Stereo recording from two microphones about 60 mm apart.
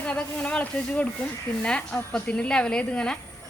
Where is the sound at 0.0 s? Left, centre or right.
Left.